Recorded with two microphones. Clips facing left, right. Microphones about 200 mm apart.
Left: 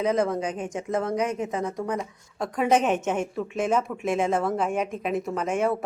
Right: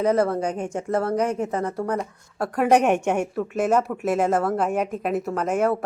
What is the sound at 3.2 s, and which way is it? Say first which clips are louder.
Speech: right 3 dB; 5° right (ahead or behind).